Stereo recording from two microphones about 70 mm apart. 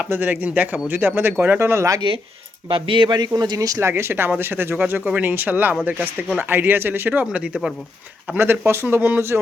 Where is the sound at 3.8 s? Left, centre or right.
Right; by 7.7 s centre.